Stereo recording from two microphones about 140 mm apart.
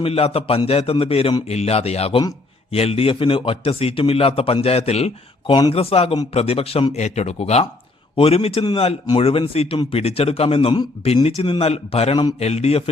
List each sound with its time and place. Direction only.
0.0 s a man's voice: 45° left (ahead or behind)
5.5 s a man's voice: 35° left (ahead or behind)